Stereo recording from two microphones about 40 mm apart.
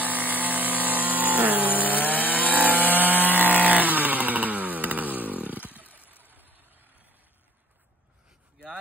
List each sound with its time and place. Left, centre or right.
0.0 s vehicle: right
3.0 s chainsaw: right
5.9 s vehicle: left
6.3 s vehicle: right